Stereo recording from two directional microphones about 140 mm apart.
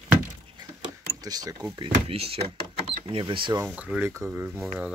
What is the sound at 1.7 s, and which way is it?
Speech, 45° right (ahead or behind).